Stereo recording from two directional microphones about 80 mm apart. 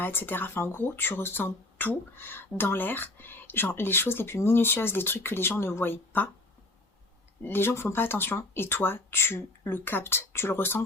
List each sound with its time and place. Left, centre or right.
0.0 s speech: left
7.4 s speech: left